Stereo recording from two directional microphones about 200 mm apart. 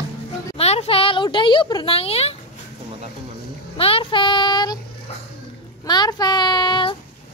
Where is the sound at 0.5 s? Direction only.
30° left (ahead or behind).